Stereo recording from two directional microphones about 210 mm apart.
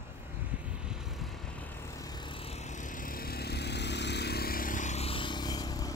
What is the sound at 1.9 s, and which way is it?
Vehicle, 15° left (ahead or behind).